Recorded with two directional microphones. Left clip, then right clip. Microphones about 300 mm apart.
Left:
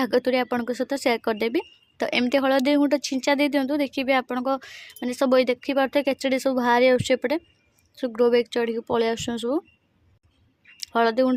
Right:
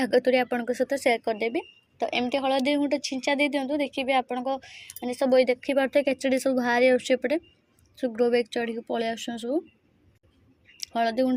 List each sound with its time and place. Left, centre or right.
0.0 s speech: centre
10.8 s speech: left